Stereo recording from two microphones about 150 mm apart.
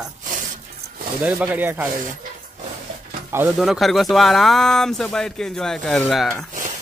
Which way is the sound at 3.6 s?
Centre (ahead or behind).